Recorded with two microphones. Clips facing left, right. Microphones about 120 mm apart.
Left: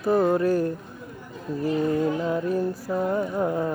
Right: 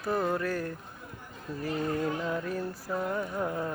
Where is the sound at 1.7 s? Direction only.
20° left (ahead or behind).